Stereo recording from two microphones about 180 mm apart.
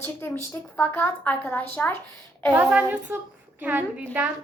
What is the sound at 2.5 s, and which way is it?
A woman's voice, 5° right (ahead or behind).